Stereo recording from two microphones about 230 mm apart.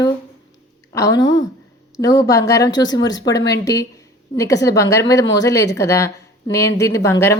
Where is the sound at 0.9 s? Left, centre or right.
Centre.